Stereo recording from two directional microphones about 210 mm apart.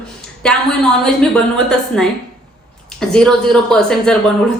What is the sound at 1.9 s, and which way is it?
Speech, 5° left (ahead or behind).